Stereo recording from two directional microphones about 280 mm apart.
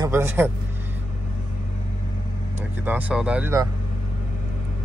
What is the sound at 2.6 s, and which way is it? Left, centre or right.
Speech, centre.